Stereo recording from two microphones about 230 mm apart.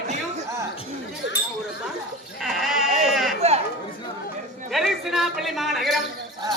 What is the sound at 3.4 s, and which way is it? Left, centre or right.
Chatter, right.